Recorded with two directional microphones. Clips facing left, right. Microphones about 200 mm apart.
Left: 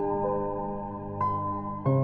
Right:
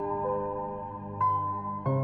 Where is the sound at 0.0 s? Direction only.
40° left (ahead or behind).